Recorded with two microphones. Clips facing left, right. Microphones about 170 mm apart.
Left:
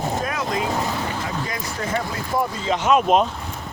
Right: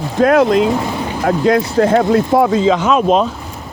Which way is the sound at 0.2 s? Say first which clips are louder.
Right 14 dB; 70° right (ahead or behind).